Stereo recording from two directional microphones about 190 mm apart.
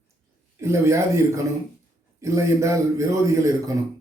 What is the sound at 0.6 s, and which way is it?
Speech, 15° right (ahead or behind).